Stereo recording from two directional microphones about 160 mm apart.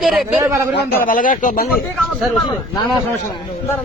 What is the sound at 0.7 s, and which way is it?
Speech, 60° left (ahead or behind).